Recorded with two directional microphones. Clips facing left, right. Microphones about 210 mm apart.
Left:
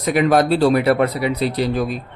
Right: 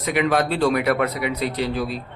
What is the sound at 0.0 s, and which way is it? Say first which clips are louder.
Speech: left 5 dB; 40° left (ahead or behind).